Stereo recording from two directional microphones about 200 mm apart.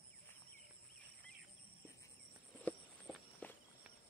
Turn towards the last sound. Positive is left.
turn(degrees=5)  # may be behind; listen again after turning